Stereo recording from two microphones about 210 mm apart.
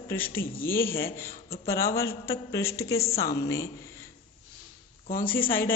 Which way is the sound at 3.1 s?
45° left (ahead or behind).